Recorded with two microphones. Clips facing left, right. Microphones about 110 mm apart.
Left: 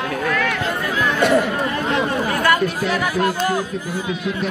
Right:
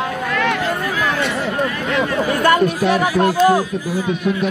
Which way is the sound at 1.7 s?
30° left (ahead or behind).